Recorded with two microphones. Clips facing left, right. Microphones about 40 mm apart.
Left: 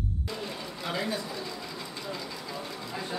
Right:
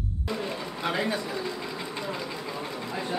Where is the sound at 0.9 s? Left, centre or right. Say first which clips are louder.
Right 3 dB; right.